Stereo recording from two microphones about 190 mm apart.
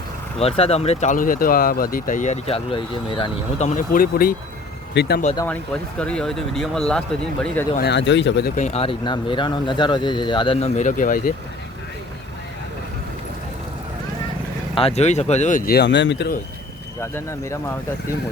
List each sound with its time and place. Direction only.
0.3 s speech: 30° left (ahead or behind)
3.8 s speech: 50° left (ahead or behind)
4.9 s speech: 60° left (ahead or behind)
6.0 s speech: 5° left (ahead or behind)
7.8 s speech: 65° left (ahead or behind)
8.5 s speech: 35° left (ahead or behind)
14.8 s speech: 35° left (ahead or behind); by 16.3 s 65° left (ahead or behind)
17.0 s speech: 15° left (ahead or behind)